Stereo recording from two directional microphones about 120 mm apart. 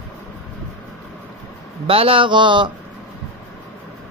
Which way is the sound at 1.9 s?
50° right (ahead or behind).